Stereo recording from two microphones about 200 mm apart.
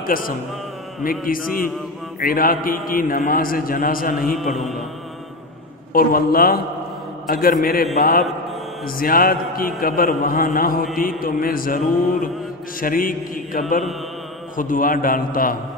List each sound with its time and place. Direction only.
0.0 s a man's voice: 45° left (ahead or behind)
5.9 s a man's voice: 45° left (ahead or behind)